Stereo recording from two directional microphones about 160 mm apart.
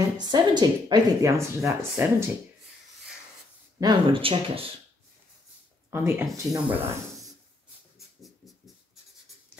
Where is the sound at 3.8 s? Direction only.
30° right (ahead or behind).